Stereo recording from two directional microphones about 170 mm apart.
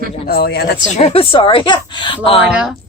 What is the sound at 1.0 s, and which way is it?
A woman's voice, 35° left (ahead or behind).